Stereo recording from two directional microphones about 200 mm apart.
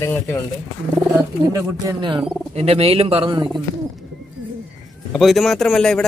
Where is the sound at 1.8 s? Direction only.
25° right (ahead or behind).